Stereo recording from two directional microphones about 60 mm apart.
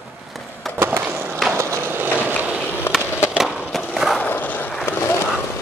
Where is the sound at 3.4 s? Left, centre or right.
Centre.